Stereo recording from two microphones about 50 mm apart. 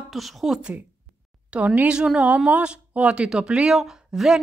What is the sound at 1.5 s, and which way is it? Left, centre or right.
Speech, right.